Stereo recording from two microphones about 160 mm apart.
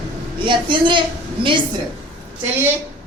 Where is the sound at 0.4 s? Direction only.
30° right (ahead or behind).